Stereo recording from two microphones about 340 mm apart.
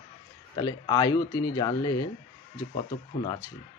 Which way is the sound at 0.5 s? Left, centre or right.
Centre.